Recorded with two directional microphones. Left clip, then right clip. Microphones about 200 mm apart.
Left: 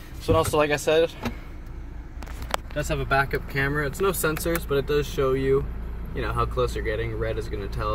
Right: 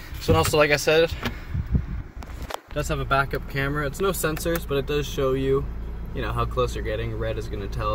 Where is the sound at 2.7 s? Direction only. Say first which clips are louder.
Right 1 dB; 20° right (ahead or behind).